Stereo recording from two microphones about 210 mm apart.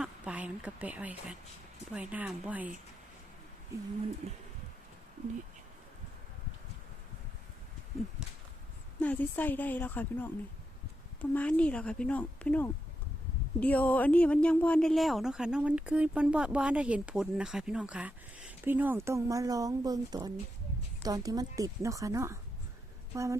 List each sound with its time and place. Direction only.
0.0 s a woman's voice: 5° right (ahead or behind)
9.0 s a woman's voice: 10° left (ahead or behind); by 23.4 s 15° right (ahead or behind)